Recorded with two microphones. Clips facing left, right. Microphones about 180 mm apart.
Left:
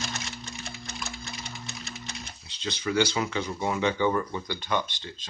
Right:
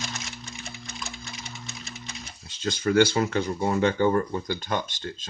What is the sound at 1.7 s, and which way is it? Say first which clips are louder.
Music: left 1 dB; 60° left (ahead or behind).